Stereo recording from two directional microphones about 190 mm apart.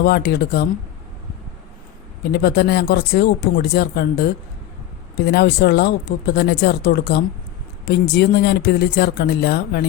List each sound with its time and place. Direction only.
0.0 s speech: 60° left (ahead or behind)
2.3 s speech: 60° left (ahead or behind)